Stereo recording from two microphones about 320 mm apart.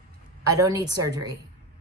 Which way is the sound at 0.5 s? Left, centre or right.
Centre.